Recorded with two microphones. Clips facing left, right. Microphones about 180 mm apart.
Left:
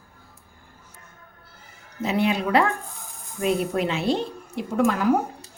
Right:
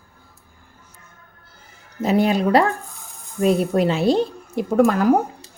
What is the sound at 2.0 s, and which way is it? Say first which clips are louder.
Speech: right 5 dB; 40° right (ahead or behind).